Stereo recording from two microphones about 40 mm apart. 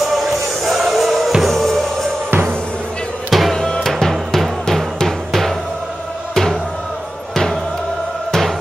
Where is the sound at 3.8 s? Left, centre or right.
Centre.